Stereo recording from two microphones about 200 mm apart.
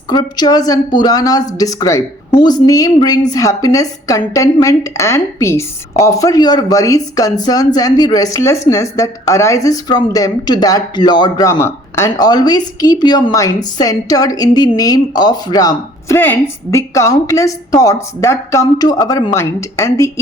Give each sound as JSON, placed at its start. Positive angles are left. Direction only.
{"t": 0.1, "sound": "a woman's voice", "side_deg": 20}